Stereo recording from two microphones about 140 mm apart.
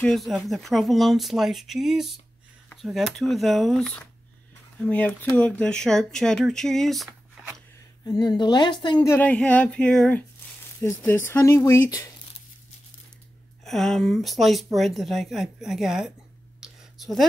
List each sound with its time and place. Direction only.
0.0 s speech: centre (ahead or behind)
5.6 s speech: 5° left (ahead or behind)
8.0 s speech: 30° left (ahead or behind)
9.0 s speech: 15° left (ahead or behind)
13.7 s speech: centre (ahead or behind)
16.6 s a sound: centre (ahead or behind)